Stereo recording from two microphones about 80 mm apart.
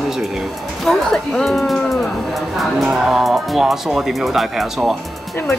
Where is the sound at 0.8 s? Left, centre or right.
Centre.